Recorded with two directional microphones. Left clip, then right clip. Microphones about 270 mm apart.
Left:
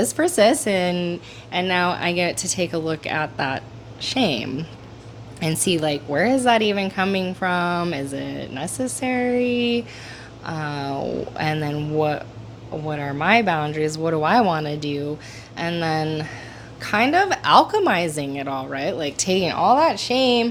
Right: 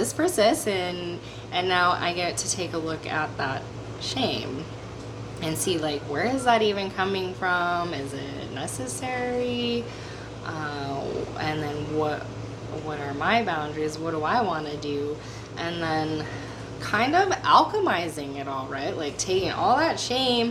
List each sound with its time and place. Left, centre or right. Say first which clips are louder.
0.0 s a woman's voice: left 5 dB; left
1.5 s a woman's voice: left 1 dB; centre
19.1 s speech: left 3 dB; left